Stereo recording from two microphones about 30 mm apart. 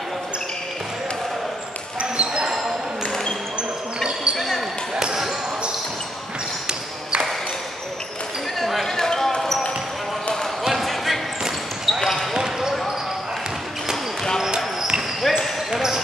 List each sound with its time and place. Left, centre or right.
2.0 s basketball bounce: right
8.8 s basketball bounce: centre
10.7 s basketball bounce: centre
12.0 s basketball bounce: centre
12.4 s basketball bounce: centre
15.3 s basketball bounce: centre
15.7 s basketball bounce: centre